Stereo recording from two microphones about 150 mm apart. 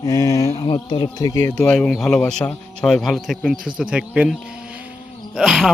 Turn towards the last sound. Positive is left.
turn(degrees=0)  # may be behind; listen again after turning